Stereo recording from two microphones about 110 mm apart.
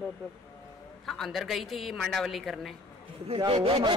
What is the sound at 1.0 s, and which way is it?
Speech, centre (ahead or behind).